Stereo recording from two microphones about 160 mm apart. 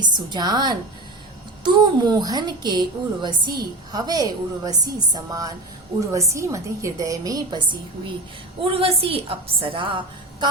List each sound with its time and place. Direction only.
0.0 s a woman's voice: 30° right (ahead or behind)